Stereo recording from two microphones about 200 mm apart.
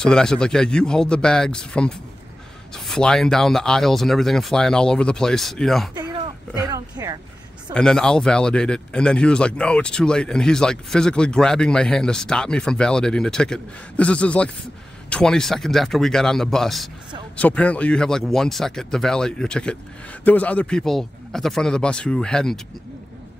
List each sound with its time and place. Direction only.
0.0 s speech: 5° left (ahead or behind)
5.9 s speech: 20° right (ahead or behind)
7.7 s speech: 5° left (ahead or behind)